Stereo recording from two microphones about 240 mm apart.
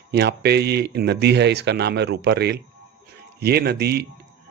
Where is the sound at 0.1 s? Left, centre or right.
Right.